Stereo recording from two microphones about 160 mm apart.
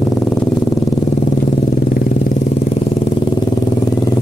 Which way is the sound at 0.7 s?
45° left (ahead or behind).